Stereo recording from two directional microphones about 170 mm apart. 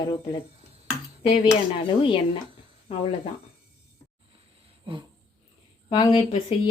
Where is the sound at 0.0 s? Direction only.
30° left (ahead or behind).